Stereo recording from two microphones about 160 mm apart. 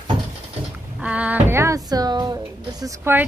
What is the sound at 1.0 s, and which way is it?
Speech, 10° right (ahead or behind).